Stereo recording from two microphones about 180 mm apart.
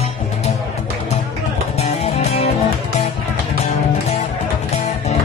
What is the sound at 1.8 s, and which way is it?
Music, 35° left (ahead or behind).